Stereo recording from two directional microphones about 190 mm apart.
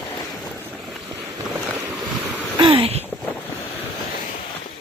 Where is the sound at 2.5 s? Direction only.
25° right (ahead or behind).